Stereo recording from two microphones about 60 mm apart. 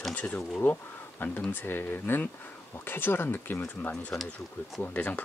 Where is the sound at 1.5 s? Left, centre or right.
Left.